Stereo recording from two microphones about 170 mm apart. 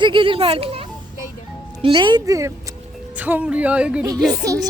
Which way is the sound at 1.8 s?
25° right (ahead or behind).